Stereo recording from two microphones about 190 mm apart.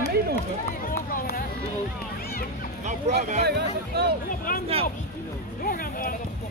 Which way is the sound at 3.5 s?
60° right (ahead or behind).